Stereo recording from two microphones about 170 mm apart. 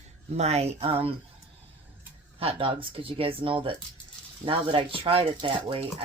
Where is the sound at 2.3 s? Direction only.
35° right (ahead or behind).